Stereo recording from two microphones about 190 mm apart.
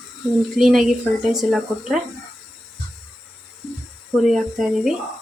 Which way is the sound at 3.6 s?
Centre (ahead or behind).